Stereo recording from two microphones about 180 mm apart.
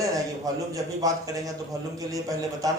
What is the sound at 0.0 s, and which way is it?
A man's voice, 20° right (ahead or behind).